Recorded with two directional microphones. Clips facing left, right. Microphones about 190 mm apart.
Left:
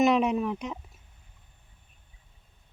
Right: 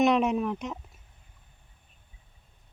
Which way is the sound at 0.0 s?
Centre (ahead or behind).